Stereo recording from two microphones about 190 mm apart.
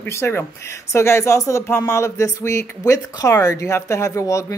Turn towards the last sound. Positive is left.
turn(degrees=15)  # may be behind; listen again after turning